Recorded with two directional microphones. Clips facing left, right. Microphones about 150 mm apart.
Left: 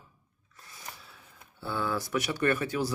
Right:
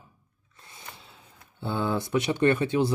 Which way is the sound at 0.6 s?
25° right (ahead or behind).